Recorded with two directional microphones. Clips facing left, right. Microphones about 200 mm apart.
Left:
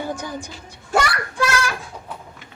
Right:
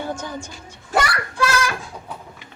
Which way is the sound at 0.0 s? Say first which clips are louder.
Even; 15° left (ahead or behind).